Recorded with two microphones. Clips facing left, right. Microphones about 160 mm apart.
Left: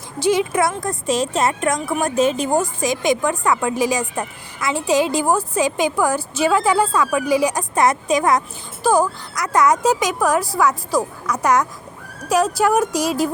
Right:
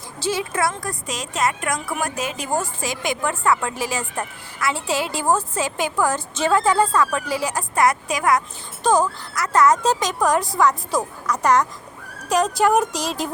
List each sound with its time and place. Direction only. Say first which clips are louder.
0.2 s a woman's voice: left 6 dB; 15° left (ahead or behind)
8.8 s a woman's voice: left 2 dB; 10° left (ahead or behind)